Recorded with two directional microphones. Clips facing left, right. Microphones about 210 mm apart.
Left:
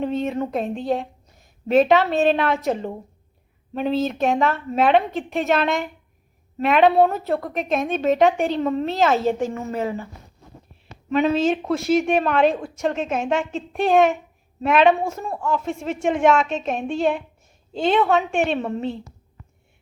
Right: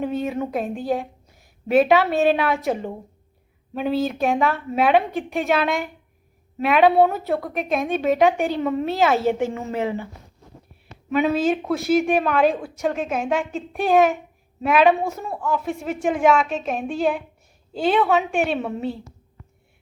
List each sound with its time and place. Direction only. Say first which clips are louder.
0.0 s a woman's voice: left 1 dB; 5° right (ahead or behind)
9.2 s a woman's voice: even; 15° right (ahead or behind)
11.1 s a woman's voice: left 1 dB; 5° right (ahead or behind)